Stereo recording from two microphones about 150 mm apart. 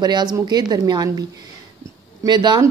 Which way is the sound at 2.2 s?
30° right (ahead or behind).